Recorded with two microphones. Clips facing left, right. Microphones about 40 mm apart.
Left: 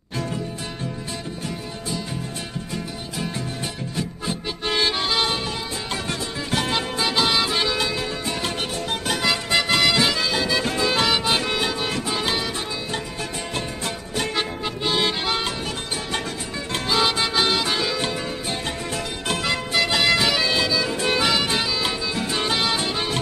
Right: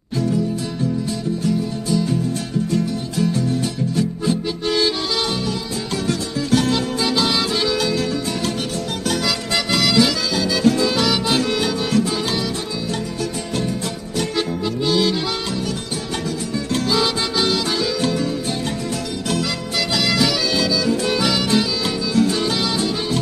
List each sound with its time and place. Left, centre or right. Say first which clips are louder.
3.9 s music: right 9 dB; left
9.1 s music: left 1 dB; left
14.9 s music: right 3 dB; left
16.7 s music: right 1 dB; left